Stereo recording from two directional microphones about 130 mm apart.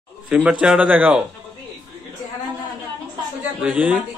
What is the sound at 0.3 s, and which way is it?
Speech, 10° right (ahead or behind).